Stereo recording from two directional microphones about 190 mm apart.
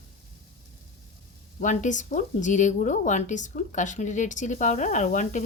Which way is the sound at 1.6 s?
40° left (ahead or behind).